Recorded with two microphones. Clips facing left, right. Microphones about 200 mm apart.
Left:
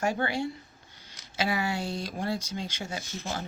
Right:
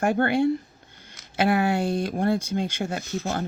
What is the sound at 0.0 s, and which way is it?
Speech, 55° right (ahead or behind).